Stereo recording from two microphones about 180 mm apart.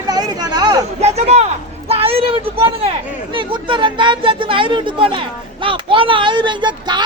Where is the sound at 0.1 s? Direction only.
20° right (ahead or behind).